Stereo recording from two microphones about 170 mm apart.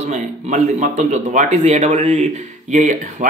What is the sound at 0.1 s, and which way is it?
A man's voice, 45° right (ahead or behind).